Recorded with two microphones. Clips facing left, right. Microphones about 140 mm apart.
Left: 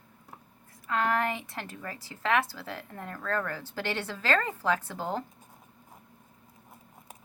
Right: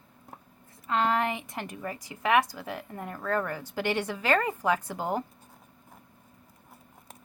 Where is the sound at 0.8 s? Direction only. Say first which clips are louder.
Right 2 dB; 20° right (ahead or behind).